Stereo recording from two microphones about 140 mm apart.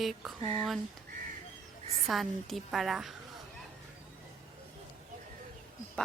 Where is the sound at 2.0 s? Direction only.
Centre (ahead or behind).